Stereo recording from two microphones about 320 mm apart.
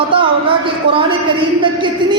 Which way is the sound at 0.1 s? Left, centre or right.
Centre.